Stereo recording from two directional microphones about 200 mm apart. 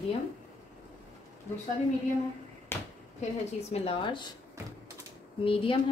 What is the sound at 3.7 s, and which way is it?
Speech, 30° left (ahead or behind).